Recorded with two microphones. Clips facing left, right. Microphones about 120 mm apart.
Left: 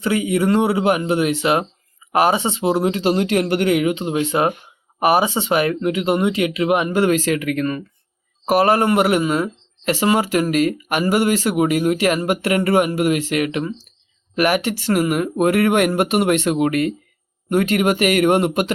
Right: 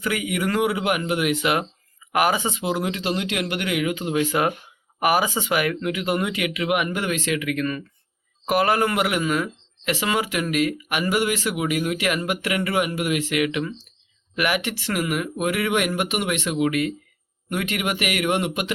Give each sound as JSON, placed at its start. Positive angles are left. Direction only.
{"t": 0.0, "sound": "speech", "side_deg": 30}